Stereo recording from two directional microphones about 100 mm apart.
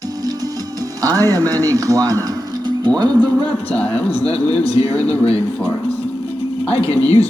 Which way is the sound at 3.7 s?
15° left (ahead or behind).